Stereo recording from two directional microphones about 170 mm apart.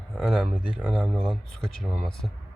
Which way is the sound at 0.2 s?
5° right (ahead or behind).